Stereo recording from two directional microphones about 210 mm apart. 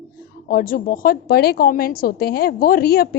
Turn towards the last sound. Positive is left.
turn(degrees=45)  # may be behind; listen again after turning